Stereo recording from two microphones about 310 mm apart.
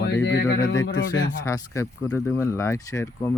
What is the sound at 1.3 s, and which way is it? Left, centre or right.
Speech, centre.